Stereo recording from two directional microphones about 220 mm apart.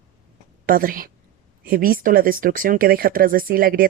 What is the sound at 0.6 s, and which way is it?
A woman's voice, 40° right (ahead or behind).